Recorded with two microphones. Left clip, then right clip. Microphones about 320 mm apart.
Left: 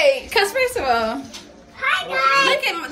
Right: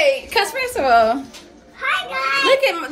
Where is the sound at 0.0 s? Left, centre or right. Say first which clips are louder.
Even; centre; by 1.2 s right.